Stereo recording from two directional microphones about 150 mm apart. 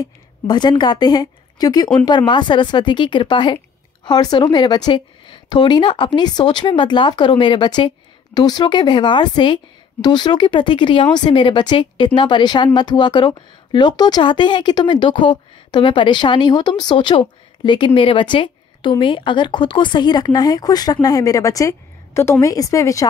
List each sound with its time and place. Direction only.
0.0 s a woman's voice: 30° left (ahead or behind)